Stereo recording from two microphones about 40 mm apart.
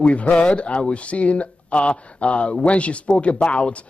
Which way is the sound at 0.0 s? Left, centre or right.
Left.